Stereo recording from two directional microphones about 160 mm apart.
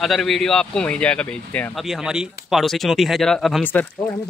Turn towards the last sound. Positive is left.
turn(degrees=5)  # may be behind; listen again after turning